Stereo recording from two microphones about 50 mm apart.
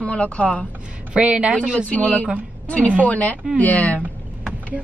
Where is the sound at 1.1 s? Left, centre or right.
Right.